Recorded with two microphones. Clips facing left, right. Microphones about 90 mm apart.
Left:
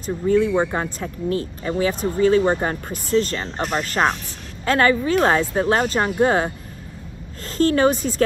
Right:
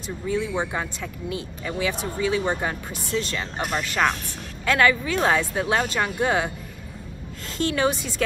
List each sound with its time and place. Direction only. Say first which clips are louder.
0.0 s speech: left 8 dB; 50° left (ahead or behind)